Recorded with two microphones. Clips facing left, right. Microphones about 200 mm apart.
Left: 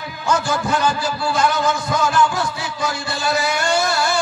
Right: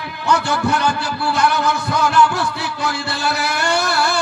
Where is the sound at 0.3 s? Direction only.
65° right (ahead or behind).